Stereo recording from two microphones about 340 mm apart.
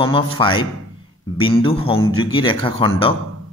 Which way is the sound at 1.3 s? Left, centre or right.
Centre.